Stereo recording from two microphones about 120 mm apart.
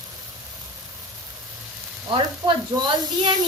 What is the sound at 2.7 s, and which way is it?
Speech, 35° right (ahead or behind).